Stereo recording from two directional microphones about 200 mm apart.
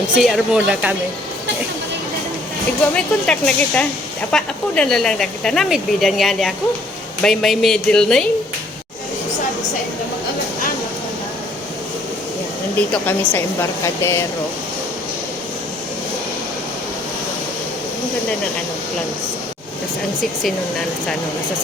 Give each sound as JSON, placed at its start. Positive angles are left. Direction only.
{"t": 0.2, "sound": "speech", "side_deg": 0}
{"t": 2.9, "sound": "speech", "side_deg": 5}
{"t": 12.9, "sound": "speech", "side_deg": 10}